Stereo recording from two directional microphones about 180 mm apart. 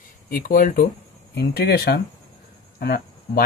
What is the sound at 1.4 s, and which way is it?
Speech, 60° left (ahead or behind).